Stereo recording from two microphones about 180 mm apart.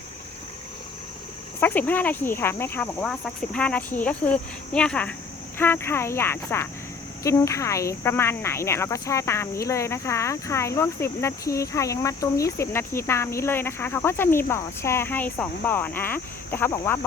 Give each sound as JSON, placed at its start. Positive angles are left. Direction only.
{"t": 1.6, "sound": "speech", "side_deg": 10}